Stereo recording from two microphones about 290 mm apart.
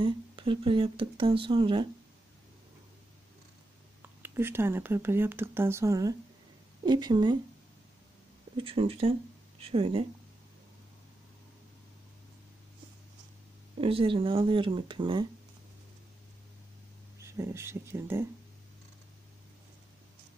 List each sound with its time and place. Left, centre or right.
0.0 s speech: centre
4.2 s speech: centre
8.5 s speech: centre
13.7 s speech: centre
17.2 s speech: centre